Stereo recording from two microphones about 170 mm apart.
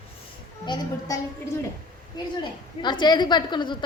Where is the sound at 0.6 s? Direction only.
25° left (ahead or behind).